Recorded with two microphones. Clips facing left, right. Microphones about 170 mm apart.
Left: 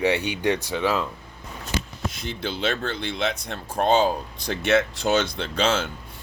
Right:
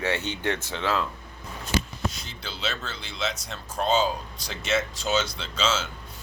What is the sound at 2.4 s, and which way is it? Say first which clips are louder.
Speech: left 7 dB; 55° left (ahead or behind).